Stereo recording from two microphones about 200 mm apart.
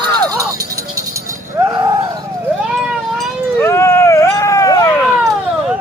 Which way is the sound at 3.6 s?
15° left (ahead or behind).